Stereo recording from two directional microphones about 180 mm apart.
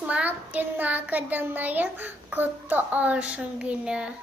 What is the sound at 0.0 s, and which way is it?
A child's voice, 10° right (ahead or behind).